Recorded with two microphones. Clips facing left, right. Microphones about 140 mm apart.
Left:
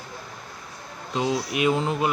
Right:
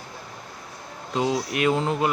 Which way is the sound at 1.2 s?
25° right (ahead or behind).